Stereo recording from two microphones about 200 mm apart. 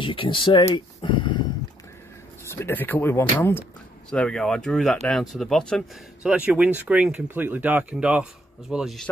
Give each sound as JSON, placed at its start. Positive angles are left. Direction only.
{"t": 0.0, "sound": "speech", "side_deg": 25}
{"t": 2.5, "sound": "speech", "side_deg": 10}